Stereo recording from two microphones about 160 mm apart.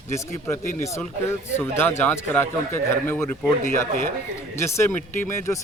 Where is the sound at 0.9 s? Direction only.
15° left (ahead or behind).